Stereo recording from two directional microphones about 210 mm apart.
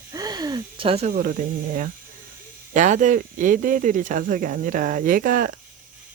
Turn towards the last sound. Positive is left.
turn(degrees=-45)  # may be behind; listen again after turning